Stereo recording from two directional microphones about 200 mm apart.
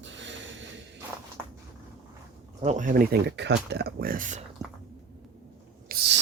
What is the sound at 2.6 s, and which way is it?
Speech, 35° right (ahead or behind).